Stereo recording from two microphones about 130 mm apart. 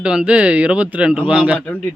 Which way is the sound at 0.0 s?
10° right (ahead or behind).